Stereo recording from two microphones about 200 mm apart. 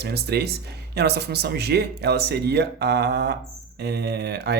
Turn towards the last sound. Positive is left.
turn(degrees=-55)  # may be behind; listen again after turning